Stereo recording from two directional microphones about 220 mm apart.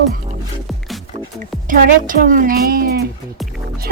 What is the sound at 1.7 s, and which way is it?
A woman's voice, 40° right (ahead or behind).